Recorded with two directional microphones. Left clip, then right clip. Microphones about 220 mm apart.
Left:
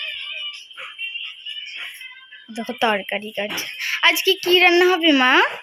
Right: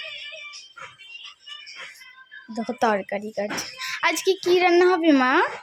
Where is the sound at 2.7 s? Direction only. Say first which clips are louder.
Left 2 dB; 5° right (ahead or behind).